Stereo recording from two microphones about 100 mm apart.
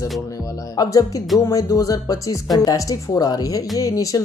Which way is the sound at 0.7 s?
35° left (ahead or behind).